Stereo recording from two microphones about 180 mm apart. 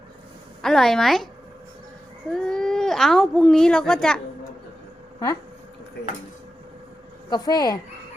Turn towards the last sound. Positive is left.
turn(degrees=20)  # may be behind; listen again after turning